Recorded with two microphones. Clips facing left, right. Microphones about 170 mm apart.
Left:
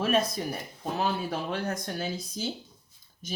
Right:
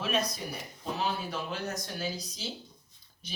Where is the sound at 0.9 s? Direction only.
50° left (ahead or behind).